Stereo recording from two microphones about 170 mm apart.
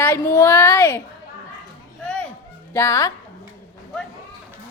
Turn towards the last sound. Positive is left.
turn(degrees=15)  # may be behind; listen again after turning